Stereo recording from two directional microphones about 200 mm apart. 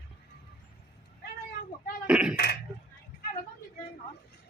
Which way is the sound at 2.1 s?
5° right (ahead or behind).